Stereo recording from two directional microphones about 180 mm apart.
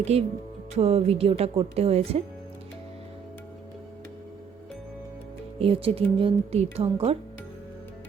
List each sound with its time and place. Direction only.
0.0 s speech: 35° right (ahead or behind)
5.5 s speech: 30° right (ahead or behind)